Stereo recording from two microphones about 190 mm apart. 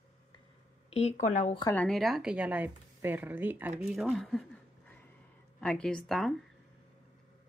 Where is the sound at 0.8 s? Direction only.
35° left (ahead or behind).